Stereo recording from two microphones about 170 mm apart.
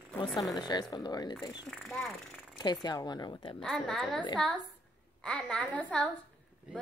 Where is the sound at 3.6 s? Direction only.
5° left (ahead or behind).